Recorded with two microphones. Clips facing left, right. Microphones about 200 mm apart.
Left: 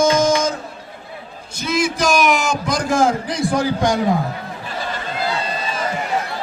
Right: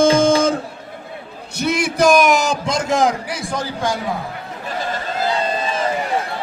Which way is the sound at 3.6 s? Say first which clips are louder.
Left 3 dB; 15° left (ahead or behind).